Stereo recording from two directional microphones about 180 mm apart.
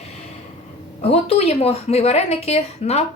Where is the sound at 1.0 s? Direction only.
35° left (ahead or behind).